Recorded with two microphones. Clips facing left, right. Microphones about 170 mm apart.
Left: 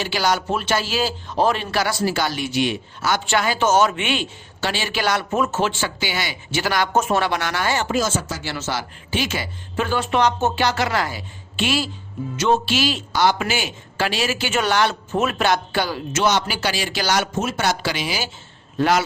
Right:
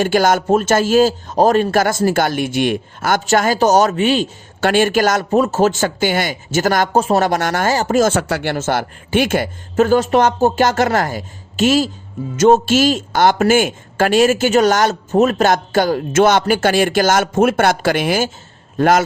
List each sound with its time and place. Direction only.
0.0 s speech: 50° right (ahead or behind)
4.6 s speech: 50° right (ahead or behind)
6.9 s speech: 35° right (ahead or behind)